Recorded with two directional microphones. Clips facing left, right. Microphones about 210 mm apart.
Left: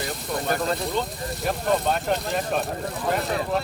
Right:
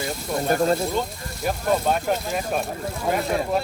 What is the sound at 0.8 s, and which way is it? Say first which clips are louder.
Speech: right 2 dB; centre (ahead or behind).